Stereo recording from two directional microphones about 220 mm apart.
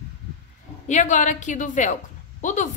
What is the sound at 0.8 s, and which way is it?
A woman's voice, 35° left (ahead or behind).